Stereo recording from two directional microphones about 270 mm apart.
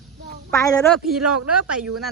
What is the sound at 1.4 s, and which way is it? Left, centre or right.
Speech, right.